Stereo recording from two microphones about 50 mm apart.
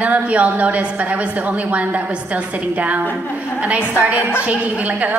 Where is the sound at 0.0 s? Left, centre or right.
Right.